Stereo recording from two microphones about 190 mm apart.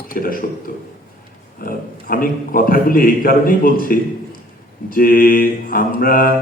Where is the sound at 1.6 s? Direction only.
50° left (ahead or behind).